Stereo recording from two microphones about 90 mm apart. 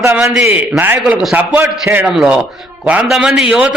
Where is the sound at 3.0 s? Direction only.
5° right (ahead or behind).